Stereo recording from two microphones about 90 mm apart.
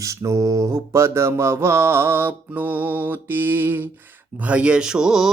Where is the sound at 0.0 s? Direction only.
35° right (ahead or behind).